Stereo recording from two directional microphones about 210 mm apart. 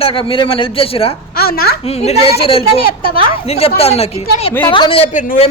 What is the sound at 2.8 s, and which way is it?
Speech, 45° left (ahead or behind).